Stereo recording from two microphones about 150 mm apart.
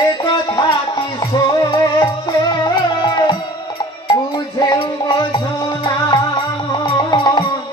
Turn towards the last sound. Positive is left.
turn(degrees=30)  # may be behind; listen again after turning